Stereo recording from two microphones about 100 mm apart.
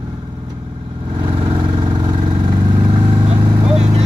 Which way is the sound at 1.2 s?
55° right (ahead or behind).